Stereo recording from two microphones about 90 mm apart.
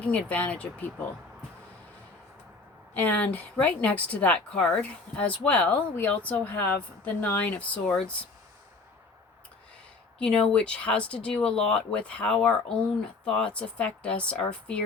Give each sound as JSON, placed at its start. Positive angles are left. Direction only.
{"t": 0.0, "sound": "speech", "side_deg": 15}
{"t": 2.9, "sound": "speech", "side_deg": 20}
{"t": 10.2, "sound": "speech", "side_deg": 10}